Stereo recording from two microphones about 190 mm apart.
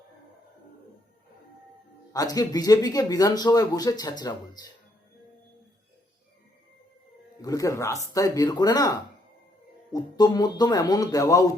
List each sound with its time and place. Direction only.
2.1 s speech: 20° left (ahead or behind)
7.4 s speech: 20° left (ahead or behind)